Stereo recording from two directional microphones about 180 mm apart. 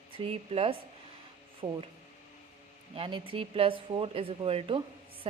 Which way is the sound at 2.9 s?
30° right (ahead or behind).